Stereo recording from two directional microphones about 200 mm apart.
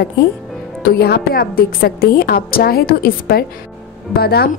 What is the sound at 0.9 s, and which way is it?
A woman's voice, 50° left (ahead or behind).